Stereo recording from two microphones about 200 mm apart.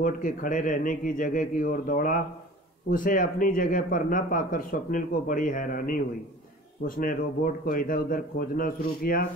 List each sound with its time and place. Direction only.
0.0 s a man's voice: 40° left (ahead or behind)
7.0 s speech: 45° left (ahead or behind)